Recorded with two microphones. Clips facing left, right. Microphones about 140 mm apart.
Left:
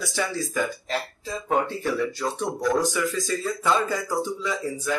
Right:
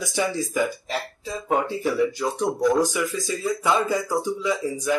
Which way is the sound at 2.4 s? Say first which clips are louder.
Right 4 dB; centre (ahead or behind).